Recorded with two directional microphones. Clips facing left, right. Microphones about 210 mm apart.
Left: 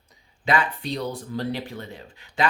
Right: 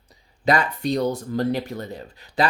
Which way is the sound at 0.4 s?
40° right (ahead or behind).